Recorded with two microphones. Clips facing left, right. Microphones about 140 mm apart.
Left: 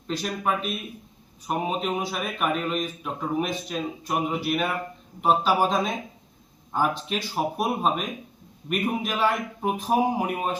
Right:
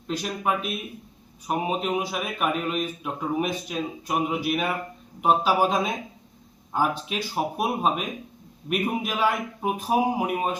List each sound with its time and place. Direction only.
0.1 s a man's voice: 10° right (ahead or behind)